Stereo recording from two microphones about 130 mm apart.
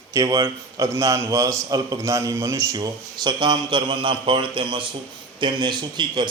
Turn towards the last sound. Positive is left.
turn(degrees=-35)  # may be behind; listen again after turning